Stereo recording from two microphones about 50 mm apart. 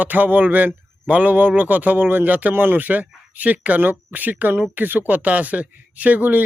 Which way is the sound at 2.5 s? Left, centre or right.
Right.